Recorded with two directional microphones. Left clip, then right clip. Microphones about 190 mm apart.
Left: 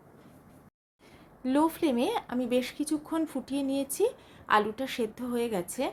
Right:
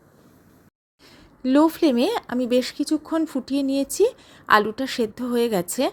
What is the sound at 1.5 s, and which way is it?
Speech, 35° right (ahead or behind).